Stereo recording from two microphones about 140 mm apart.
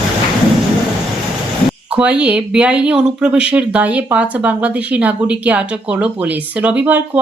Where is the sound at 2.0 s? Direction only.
10° right (ahead or behind).